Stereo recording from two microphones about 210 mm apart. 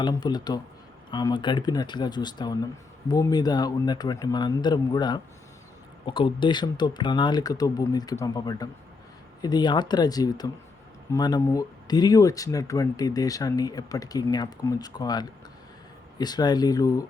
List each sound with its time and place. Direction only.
0.0 s speech: 20° left (ahead or behind)